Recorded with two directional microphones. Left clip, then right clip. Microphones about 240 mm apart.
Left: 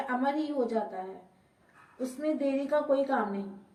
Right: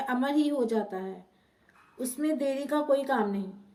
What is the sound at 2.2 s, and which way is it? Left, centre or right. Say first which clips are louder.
A woman's voice: right 1 dB; right.